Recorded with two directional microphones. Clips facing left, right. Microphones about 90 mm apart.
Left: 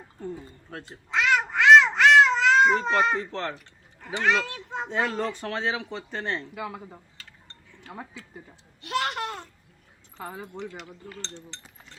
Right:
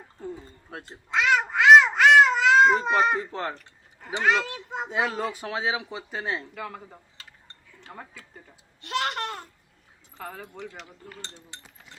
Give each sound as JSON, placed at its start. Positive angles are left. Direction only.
{"t": 0.2, "sound": "speech", "side_deg": -5}
{"t": 0.7, "sound": "babbling", "side_deg": -5}
{"t": 4.2, "sound": "speech", "side_deg": -10}
{"t": 6.5, "sound": "speech", "side_deg": 5}
{"t": 7.2, "sound": "cutlery", "side_deg": -15}
{"t": 8.4, "sound": "speech", "side_deg": 0}
{"t": 11.0, "sound": "speech", "side_deg": -10}